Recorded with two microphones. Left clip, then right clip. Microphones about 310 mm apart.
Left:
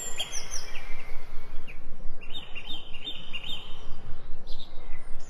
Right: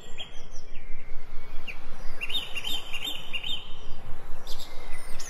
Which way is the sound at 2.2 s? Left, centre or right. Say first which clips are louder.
Right 9 dB; right.